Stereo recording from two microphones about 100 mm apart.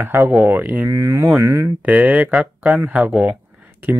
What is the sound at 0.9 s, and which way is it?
Speech, 30° right (ahead or behind).